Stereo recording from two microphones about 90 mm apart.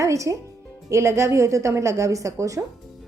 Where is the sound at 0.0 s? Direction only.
35° right (ahead or behind).